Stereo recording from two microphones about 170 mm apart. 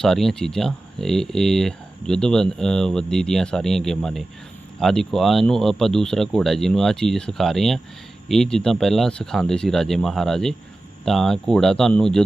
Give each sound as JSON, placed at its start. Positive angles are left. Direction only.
{"t": 0.0, "sound": "speech", "side_deg": 0}